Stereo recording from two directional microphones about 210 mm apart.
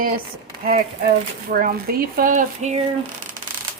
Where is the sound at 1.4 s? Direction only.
45° right (ahead or behind).